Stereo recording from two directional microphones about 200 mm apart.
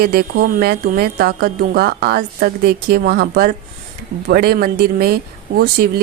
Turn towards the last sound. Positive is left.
turn(degrees=-50)  # may be behind; listen again after turning